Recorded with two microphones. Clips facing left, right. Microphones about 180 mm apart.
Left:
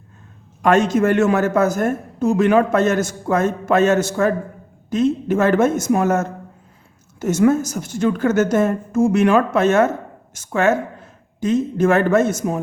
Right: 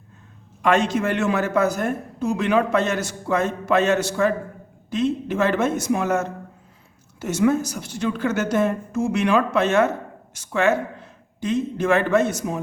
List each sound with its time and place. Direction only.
0.6 s a woman's voice: 45° left (ahead or behind)